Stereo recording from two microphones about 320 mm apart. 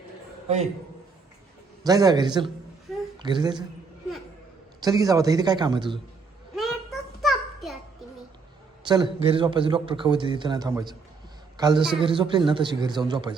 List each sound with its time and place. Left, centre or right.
0.4 s a man's voice: centre
1.8 s a man's voice: centre
2.9 s a sound: centre
3.2 s a man's voice: centre
4.8 s a man's voice: centre
7.2 s a sound: centre
8.8 s a man's voice: centre